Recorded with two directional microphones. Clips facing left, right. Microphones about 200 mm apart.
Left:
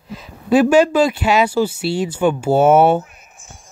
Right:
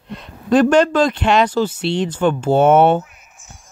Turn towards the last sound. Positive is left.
turn(degrees=5)  # may be behind; listen again after turning